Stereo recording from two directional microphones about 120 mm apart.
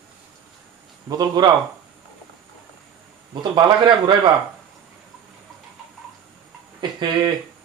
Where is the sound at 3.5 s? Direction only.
40° right (ahead or behind).